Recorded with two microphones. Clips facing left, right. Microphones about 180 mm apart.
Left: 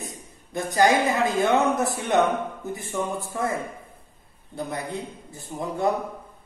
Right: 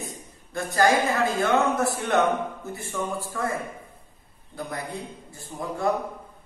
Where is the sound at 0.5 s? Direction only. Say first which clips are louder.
Left 1 dB; 20° left (ahead or behind).